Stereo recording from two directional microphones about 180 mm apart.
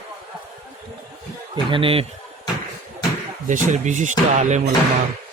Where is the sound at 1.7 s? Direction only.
30° right (ahead or behind).